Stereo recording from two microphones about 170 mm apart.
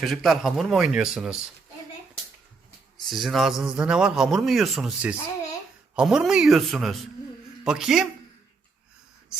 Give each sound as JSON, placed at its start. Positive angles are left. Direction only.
{"t": 0.0, "sound": "speech", "side_deg": 0}
{"t": 3.0, "sound": "speech", "side_deg": 0}